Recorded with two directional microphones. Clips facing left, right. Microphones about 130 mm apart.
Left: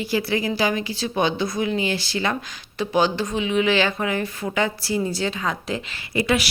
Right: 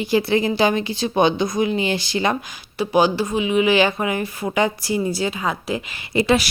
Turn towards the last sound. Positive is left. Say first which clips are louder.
# right 4 dB
turn(degrees=-30)  # may be behind; listen again after turning